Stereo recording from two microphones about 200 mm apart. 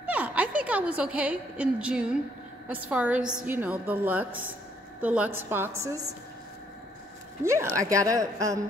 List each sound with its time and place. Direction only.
0.0 s a sound: 5° right (ahead or behind)
0.7 s a woman's voice: 5° right (ahead or behind)
4.3 s speech: 80° right
5.0 s a woman's voice: 5° right (ahead or behind)
7.7 s a woman's voice: 15° right (ahead or behind)